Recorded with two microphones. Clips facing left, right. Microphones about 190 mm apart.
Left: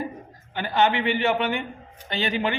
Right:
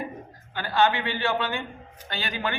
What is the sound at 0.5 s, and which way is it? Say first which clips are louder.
A man's voice: left 1 dB; 20° left (ahead or behind).